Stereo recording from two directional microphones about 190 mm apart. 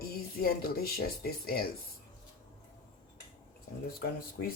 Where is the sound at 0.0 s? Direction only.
50° left (ahead or behind).